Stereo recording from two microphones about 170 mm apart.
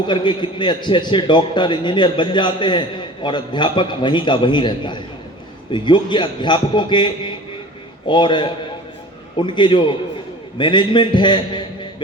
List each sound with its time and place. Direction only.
0.1 s a man's voice: 30° left (ahead or behind)